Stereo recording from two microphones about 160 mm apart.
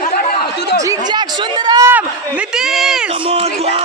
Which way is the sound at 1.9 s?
10° right (ahead or behind).